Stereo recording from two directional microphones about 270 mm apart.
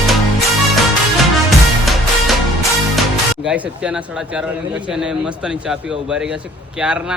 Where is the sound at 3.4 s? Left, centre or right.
Centre.